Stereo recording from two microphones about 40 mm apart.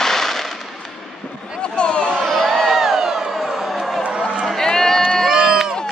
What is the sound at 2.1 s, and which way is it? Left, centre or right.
Crowd, centre.